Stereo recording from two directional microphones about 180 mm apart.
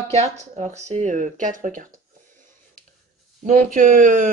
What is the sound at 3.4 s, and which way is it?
Speech, 45° right (ahead or behind).